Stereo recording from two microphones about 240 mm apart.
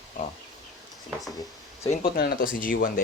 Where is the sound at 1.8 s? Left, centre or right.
Left.